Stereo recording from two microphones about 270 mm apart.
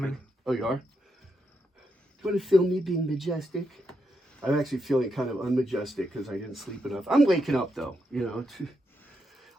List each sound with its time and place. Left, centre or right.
0.0 s a sound: centre
2.2 s speech: centre
9.3 s music: centre